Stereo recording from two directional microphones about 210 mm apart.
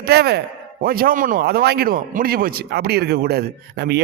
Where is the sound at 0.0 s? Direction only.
50° right (ahead or behind).